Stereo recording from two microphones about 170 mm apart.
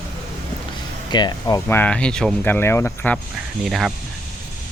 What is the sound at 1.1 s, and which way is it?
Speech, 25° left (ahead or behind).